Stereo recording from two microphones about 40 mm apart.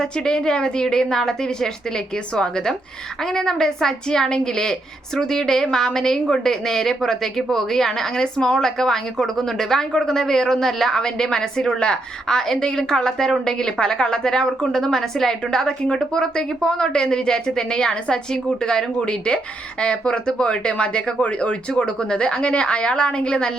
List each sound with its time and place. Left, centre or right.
0.0 s a woman's voice: centre
18.9 s a woman's voice: left
21.7 s a woman's voice: left